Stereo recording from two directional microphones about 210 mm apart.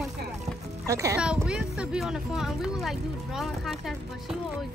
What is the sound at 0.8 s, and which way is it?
Speech, 15° right (ahead or behind).